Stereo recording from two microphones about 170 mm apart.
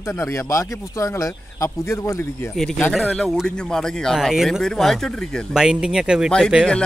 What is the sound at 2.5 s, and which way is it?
Speech, 5° left (ahead or behind).